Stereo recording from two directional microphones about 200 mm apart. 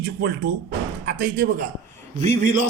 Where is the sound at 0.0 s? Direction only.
50° right (ahead or behind).